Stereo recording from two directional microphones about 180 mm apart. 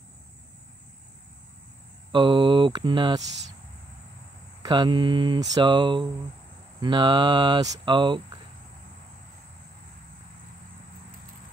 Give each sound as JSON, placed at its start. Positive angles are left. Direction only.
{"t": 2.1, "sound": "speech", "side_deg": -25}
{"t": 4.6, "sound": "speech", "side_deg": -25}